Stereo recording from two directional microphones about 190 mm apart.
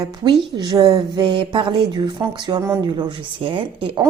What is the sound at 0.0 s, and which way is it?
Speech, 20° right (ahead or behind).